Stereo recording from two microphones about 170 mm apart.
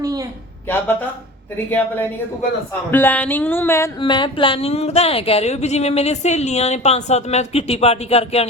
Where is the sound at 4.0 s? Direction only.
30° left (ahead or behind).